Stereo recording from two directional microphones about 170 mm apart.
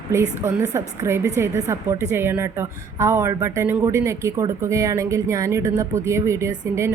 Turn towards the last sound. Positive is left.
turn(degrees=-15)  # may be behind; listen again after turning